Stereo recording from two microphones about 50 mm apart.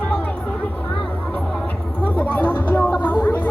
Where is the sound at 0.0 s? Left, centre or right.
Left.